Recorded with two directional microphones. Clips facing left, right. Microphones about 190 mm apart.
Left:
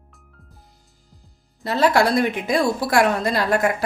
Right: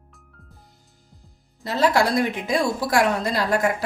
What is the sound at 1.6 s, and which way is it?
A woman's voice, 60° left (ahead or behind).